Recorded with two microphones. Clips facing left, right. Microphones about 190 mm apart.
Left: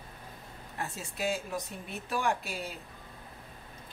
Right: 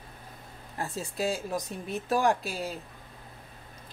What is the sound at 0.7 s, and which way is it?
A woman's voice, 35° right (ahead or behind).